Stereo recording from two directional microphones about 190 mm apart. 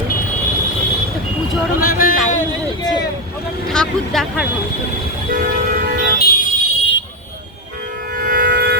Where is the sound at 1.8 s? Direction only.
45° left (ahead or behind).